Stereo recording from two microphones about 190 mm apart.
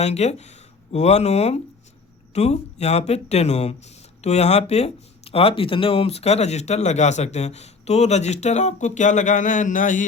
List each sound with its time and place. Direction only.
0.0 s speech: 35° left (ahead or behind)